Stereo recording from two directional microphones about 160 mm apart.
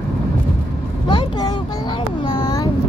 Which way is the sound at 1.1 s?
30° left (ahead or behind).